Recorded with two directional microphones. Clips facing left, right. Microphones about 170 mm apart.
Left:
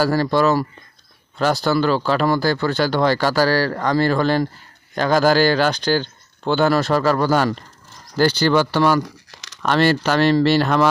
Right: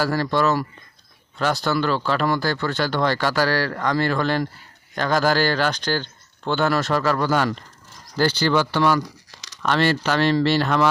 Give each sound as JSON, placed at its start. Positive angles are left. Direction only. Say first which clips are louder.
{"t": 0.0, "sound": "speech", "louder": "left 4 dB", "side_deg": 35}
{"t": 9.0, "sound": "crumpling", "louder": "left 3 dB", "side_deg": 60}
{"t": 9.6, "sound": "speech", "louder": "left 3 dB", "side_deg": 40}